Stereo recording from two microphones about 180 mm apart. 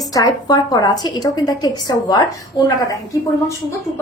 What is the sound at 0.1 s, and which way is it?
A woman's voice, 20° left (ahead or behind).